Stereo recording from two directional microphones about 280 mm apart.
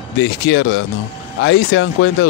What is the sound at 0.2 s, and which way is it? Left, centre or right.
Speech, left.